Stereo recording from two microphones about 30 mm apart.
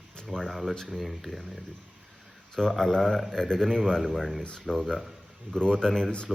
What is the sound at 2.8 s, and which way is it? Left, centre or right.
A man's voice, centre.